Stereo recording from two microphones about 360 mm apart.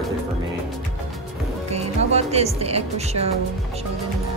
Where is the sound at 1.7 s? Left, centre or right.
Centre.